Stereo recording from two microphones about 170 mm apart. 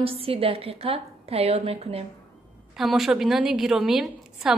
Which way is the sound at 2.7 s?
Centre (ahead or behind).